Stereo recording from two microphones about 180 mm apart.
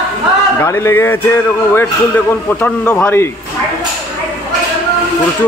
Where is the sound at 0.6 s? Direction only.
15° left (ahead or behind).